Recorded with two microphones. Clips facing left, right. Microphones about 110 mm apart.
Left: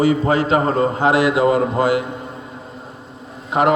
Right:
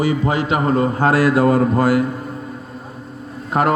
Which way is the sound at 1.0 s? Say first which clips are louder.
Right 1 dB; 20° left (ahead or behind).